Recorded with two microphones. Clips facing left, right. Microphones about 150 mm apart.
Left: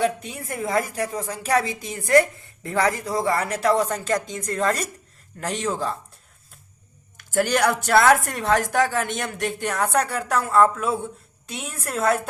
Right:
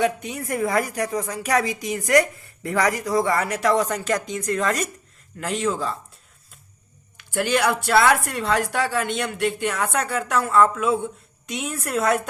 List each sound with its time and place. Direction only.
0.0 s a woman's voice: 30° left (ahead or behind)
7.2 s a woman's voice: 45° left (ahead or behind)